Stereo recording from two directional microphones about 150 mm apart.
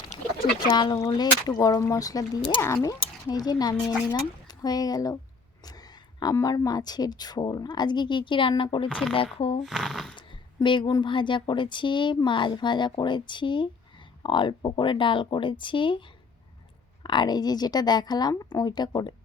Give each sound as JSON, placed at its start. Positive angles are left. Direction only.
{"t": 0.7, "sound": "speech", "side_deg": 30}
{"t": 6.1, "sound": "speech", "side_deg": 25}
{"t": 8.9, "sound": "speech", "side_deg": 0}
{"t": 9.1, "sound": "speech", "side_deg": 40}
{"t": 9.6, "sound": "speech", "side_deg": 0}
{"t": 10.2, "sound": "speech", "side_deg": 30}